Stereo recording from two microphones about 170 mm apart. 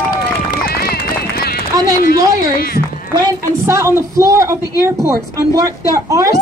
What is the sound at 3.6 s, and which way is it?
A woman's voice, 15° right (ahead or behind).